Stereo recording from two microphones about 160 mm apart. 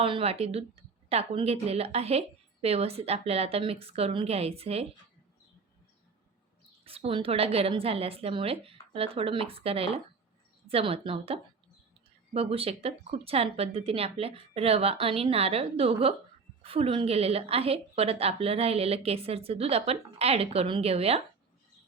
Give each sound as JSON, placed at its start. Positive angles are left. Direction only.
{"t": 0.0, "sound": "a woman's voice", "side_deg": -35}
{"t": 6.8, "sound": "a woman's voice", "side_deg": -35}